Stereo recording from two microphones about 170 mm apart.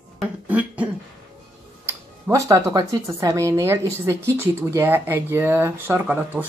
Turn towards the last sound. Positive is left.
turn(degrees=-10)  # may be behind; listen again after turning